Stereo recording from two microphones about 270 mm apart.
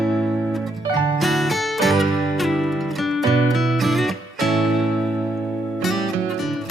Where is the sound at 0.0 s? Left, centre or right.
Centre.